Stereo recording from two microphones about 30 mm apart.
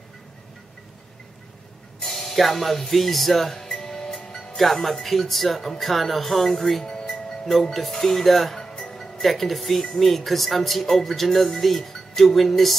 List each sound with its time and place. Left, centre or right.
2.0 s speech: centre
3.5 s music: centre
4.6 s speech: centre
6.8 s music: centre
7.9 s speech: centre